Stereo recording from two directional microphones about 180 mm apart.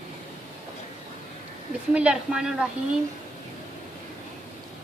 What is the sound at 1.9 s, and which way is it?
Speech, 5° right (ahead or behind).